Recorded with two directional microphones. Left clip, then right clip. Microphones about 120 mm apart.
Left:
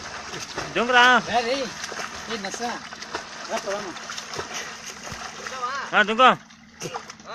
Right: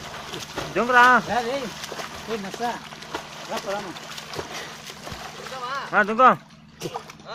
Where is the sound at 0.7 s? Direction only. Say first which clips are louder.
Right 1 dB; 10° left (ahead or behind).